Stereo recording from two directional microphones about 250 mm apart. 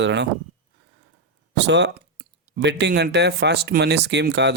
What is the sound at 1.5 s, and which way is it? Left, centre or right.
Speech, right.